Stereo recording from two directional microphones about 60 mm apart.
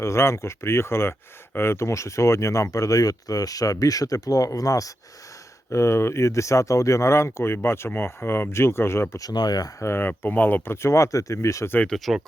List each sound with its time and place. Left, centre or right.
0.0 s speech: left
5.7 s speech: left
9.1 s speech: left
9.8 s speech: left
10.7 s speech: left
11.9 s speech: centre